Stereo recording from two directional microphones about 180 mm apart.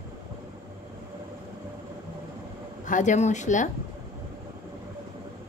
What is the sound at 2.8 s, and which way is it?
Speech, 45° left (ahead or behind).